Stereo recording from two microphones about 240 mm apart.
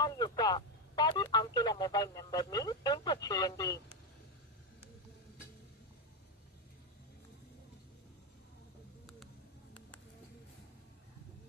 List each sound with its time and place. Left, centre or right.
0.0 s speech: centre